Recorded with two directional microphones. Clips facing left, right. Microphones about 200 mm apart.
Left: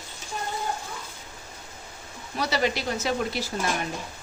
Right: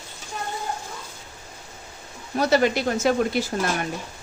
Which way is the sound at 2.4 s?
50° right (ahead or behind).